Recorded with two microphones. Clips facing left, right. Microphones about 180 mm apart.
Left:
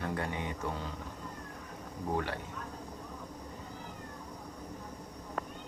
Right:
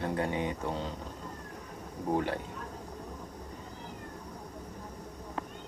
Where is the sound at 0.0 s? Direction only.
25° right (ahead or behind).